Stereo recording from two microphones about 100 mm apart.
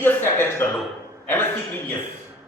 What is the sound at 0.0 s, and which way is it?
Speech, 20° left (ahead or behind).